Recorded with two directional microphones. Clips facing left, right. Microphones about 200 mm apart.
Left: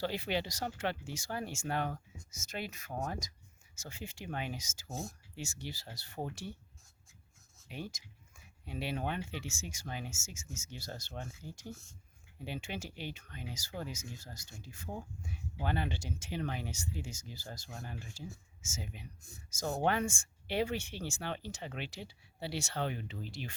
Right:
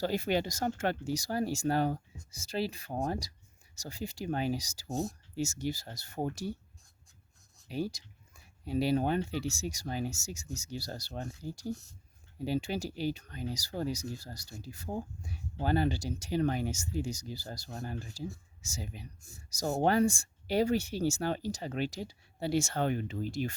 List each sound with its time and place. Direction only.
0.0 s speech: 45° right (ahead or behind)
7.7 s speech: 35° right (ahead or behind)